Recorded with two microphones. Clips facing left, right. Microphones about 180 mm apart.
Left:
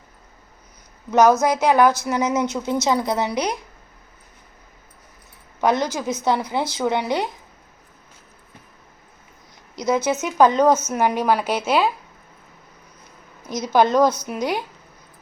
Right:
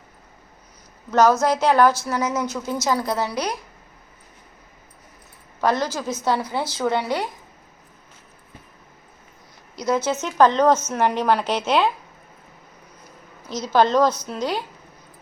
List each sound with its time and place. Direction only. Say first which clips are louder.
1.1 s a woman's voice: left 1 dB; 15° left (ahead or behind)
5.5 s a woman's voice: left 2 dB; 15° left (ahead or behind)
9.7 s a woman's voice: left 1 dB; 10° left (ahead or behind)
13.5 s a woman's voice: left 1 dB; 15° left (ahead or behind)